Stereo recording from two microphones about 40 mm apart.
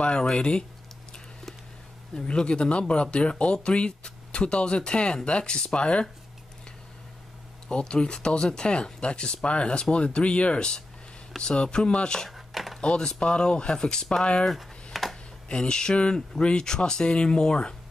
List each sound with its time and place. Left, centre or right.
0.0 s speech: left
2.1 s speech: left
7.6 s speech: left
12.3 s a sound: centre
12.8 s speech: left
14.4 s a sound: centre
15.4 s speech: left